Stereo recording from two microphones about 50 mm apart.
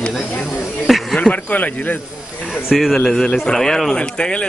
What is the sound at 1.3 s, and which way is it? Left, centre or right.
Speech, left.